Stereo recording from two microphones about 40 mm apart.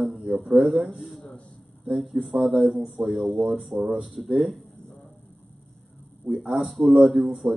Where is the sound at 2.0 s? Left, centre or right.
Centre.